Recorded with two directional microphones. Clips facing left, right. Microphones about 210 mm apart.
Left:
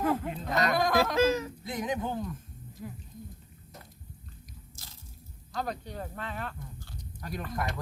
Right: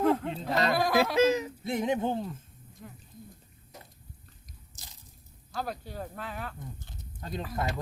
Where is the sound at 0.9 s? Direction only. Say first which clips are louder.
Right 3 dB; 20° right (ahead or behind).